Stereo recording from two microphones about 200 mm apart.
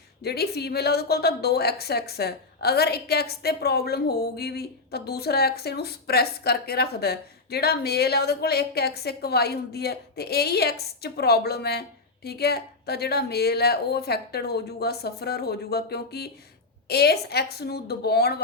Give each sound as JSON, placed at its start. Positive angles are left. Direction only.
{"t": 0.2, "sound": "a woman's voice", "side_deg": 55}